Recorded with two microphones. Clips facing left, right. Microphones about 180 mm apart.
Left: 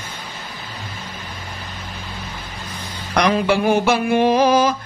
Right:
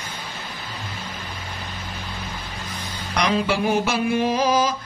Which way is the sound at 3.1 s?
55° left (ahead or behind).